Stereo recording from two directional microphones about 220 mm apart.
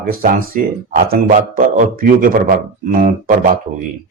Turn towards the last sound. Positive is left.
turn(degrees=-40)  # may be behind; listen again after turning